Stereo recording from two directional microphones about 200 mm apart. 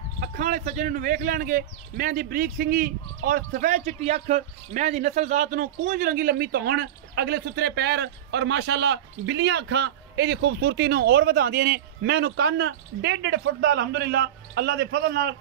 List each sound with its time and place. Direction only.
0.2 s speech: 40° right (ahead or behind)